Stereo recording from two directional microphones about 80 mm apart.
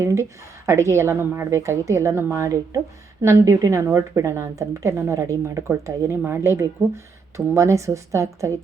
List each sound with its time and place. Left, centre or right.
0.0 s a woman's voice: right